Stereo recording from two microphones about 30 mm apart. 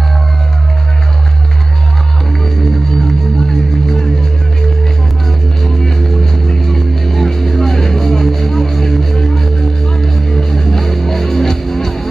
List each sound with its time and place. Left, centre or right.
2.4 s music: centre
5.6 s music: centre